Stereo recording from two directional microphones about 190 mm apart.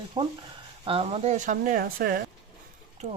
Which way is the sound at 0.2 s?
25° right (ahead or behind).